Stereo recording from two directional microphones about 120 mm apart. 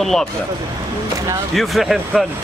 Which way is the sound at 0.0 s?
5° left (ahead or behind).